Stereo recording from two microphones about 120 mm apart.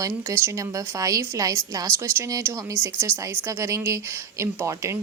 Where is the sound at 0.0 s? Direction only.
25° right (ahead or behind).